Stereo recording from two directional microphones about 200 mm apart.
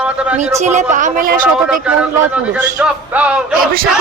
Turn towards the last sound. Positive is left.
turn(degrees=-5)  # may be behind; listen again after turning